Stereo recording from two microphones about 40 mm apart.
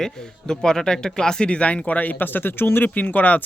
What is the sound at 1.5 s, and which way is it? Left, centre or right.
Speech, left.